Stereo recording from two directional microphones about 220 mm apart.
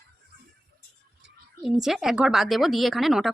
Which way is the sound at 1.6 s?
Centre (ahead or behind).